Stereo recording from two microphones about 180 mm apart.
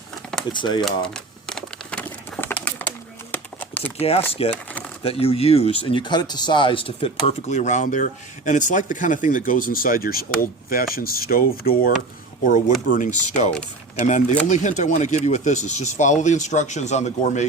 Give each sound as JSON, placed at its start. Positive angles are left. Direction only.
{"t": 0.5, "sound": "speech", "side_deg": 25}
{"t": 0.9, "sound": "crumpling", "side_deg": 5}
{"t": 3.3, "sound": "a sound", "side_deg": 10}
{"t": 4.0, "sound": "speech", "side_deg": 35}
{"t": 12.9, "sound": "speech", "side_deg": 45}